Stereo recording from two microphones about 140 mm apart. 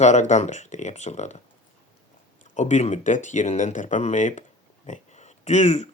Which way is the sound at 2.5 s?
55° left (ahead or behind).